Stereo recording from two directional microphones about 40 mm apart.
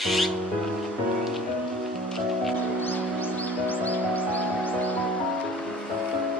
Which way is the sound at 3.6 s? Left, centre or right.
Left.